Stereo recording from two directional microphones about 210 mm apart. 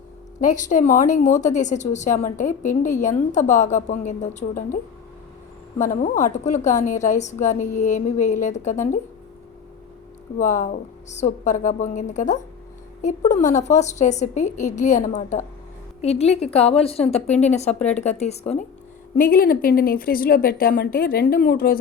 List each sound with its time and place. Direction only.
0.3 s a woman's voice: 35° left (ahead or behind)
5.9 s a woman's voice: 35° left (ahead or behind)
10.3 s a woman's voice: 35° left (ahead or behind)
19.1 s speech: 45° left (ahead or behind)